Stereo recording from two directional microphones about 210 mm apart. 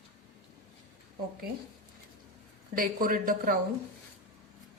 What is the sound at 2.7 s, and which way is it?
Speech, 40° right (ahead or behind).